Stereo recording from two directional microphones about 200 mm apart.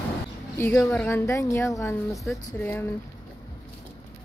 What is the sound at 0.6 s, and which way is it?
A woman's voice, 10° left (ahead or behind).